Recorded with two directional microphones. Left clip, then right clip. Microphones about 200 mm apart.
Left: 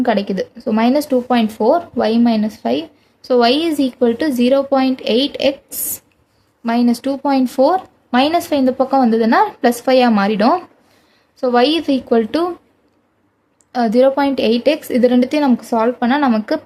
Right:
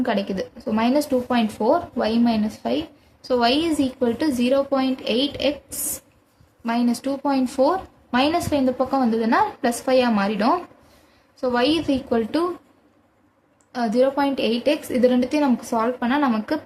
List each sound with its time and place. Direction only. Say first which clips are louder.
0.0 s speech: left 7 dB; 40° left (ahead or behind)
13.7 s a woman's voice: left 7 dB; 40° left (ahead or behind)